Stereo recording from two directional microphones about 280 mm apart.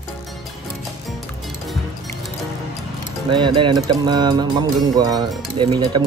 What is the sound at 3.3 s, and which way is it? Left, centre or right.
Speech, centre.